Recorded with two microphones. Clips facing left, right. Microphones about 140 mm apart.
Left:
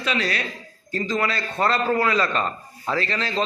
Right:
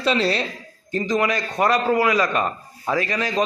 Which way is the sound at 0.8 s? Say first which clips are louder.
Right 3 dB; 20° right (ahead or behind).